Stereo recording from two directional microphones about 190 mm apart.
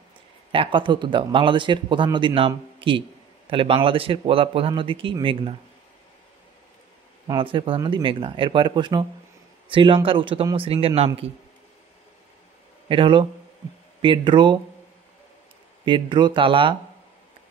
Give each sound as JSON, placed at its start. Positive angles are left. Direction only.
{"t": 0.5, "sound": "speech", "side_deg": -25}
{"t": 7.2, "sound": "speech", "side_deg": -25}
{"t": 12.8, "sound": "speech", "side_deg": -25}
{"t": 15.8, "sound": "speech", "side_deg": -25}